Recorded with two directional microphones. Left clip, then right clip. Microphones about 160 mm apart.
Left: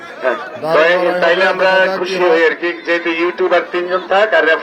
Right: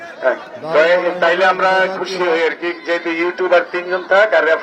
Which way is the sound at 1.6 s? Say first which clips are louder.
Left 3 dB; 45° right (ahead or behind).